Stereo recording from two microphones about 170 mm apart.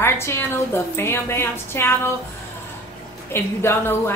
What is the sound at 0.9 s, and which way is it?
Speech, 15° left (ahead or behind).